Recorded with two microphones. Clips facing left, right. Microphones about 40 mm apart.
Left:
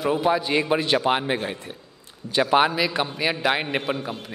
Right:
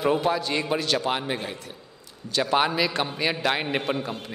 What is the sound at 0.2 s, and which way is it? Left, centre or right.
A man's voice, centre.